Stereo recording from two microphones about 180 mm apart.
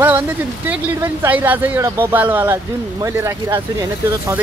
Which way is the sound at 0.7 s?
10° right (ahead or behind).